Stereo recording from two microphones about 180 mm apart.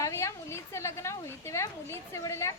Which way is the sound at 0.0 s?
15° left (ahead or behind).